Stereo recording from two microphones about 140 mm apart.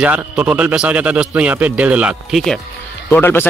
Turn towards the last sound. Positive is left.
turn(degrees=15)  # may be behind; listen again after turning